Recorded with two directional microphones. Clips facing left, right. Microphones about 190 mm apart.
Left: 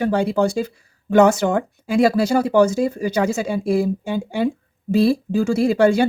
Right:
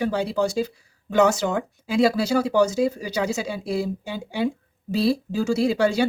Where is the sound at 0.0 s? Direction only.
55° left (ahead or behind).